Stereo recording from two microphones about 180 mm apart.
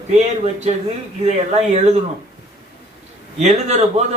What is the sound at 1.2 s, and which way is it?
Speech, 35° right (ahead or behind).